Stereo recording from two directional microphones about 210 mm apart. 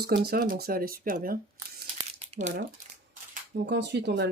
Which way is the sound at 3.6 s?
55° right (ahead or behind).